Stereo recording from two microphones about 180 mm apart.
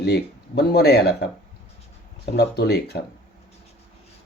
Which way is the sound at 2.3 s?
60° left (ahead or behind).